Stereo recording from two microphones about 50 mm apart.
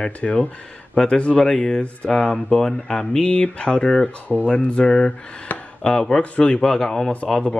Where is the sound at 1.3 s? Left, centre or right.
Centre.